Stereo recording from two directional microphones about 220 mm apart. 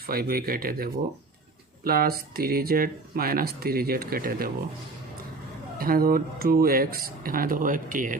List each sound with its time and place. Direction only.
0.1 s speech: 40° right (ahead or behind)
5.7 s speech: 40° right (ahead or behind)